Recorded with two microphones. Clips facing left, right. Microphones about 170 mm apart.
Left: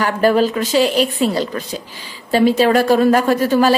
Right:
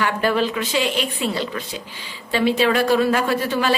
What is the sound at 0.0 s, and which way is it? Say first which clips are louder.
A woman's voice: left 6 dB; 40° left (ahead or behind).